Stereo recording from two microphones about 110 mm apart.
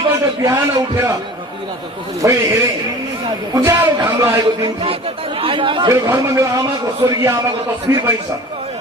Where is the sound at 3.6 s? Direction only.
20° right (ahead or behind).